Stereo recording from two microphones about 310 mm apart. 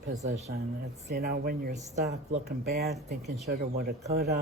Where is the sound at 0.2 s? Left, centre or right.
Right.